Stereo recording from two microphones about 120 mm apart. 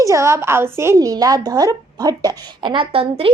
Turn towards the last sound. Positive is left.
turn(degrees=-50)  # may be behind; listen again after turning